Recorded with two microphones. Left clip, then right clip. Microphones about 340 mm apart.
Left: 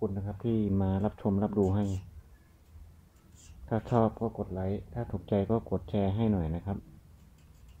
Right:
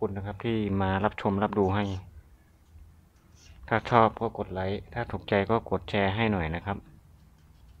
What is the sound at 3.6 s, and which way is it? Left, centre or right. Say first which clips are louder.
Speech: right 7 dB; right.